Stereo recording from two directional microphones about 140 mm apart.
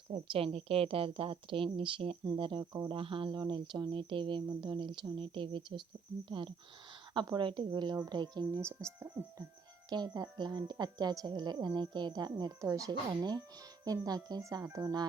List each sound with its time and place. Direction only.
0.1 s a woman's voice: 45° right (ahead or behind)
8.6 s a woman's voice: 20° right (ahead or behind)
9.9 s a woman's voice: 30° right (ahead or behind)